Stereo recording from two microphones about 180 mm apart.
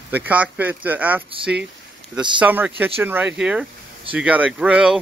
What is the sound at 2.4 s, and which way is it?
Speech, 10° right (ahead or behind).